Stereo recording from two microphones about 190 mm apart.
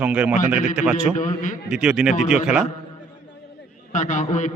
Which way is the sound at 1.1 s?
40° left (ahead or behind).